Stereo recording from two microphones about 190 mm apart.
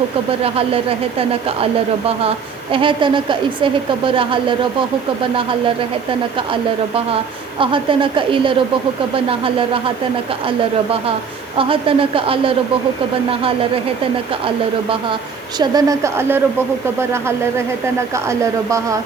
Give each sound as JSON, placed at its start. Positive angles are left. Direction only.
{"t": 0.4, "sound": "a woman's voice", "side_deg": -30}
{"t": 6.5, "sound": "a woman's voice", "side_deg": -30}
{"t": 11.5, "sound": "a woman's voice", "side_deg": -30}
{"t": 15.5, "sound": "a woman's voice", "side_deg": -20}